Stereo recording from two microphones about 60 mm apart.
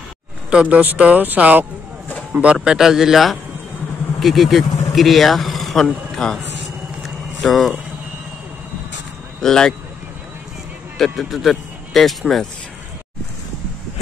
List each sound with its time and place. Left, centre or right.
0.5 s a man's voice: right; by 6.4 s centre
7.4 s speech: centre
9.4 s speech: centre
11.0 s speech: centre